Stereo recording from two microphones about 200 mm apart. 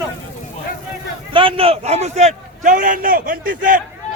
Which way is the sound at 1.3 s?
25° right (ahead or behind).